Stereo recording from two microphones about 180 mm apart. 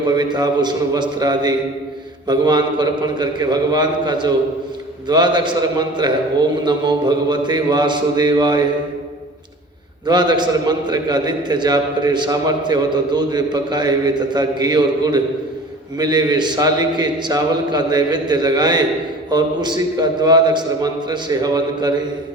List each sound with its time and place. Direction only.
0.1 s a man's voice: 25° right (ahead or behind)
10.1 s a man's voice: 25° right (ahead or behind)